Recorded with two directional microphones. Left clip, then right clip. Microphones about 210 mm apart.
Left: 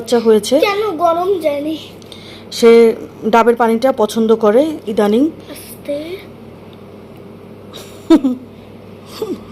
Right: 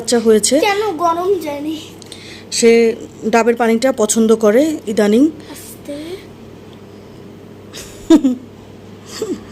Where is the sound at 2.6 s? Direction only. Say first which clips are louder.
Left 3 dB; centre (ahead or behind); by 5.3 s 15° right (ahead or behind).